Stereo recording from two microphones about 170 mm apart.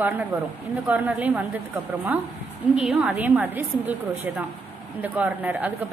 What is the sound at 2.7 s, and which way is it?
A woman's voice, 5° right (ahead or behind).